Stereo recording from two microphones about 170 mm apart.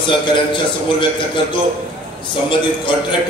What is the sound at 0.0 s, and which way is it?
A man's voice, 30° left (ahead or behind).